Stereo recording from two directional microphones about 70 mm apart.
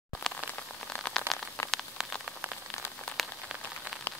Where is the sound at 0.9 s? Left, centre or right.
Centre.